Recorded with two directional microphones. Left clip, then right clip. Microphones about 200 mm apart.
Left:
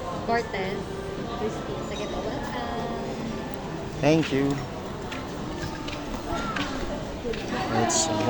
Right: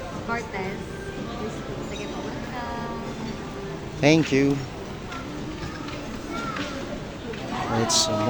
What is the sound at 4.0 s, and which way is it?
Speech, 40° right (ahead or behind).